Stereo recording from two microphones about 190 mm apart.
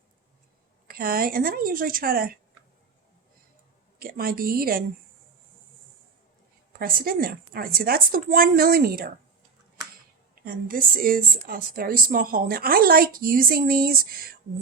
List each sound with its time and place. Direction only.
0.9 s a woman's voice: 50° right (ahead or behind)
4.0 s a woman's voice: 50° right (ahead or behind)
6.7 s a woman's voice: 50° right (ahead or behind)
10.4 s a woman's voice: 50° right (ahead or behind)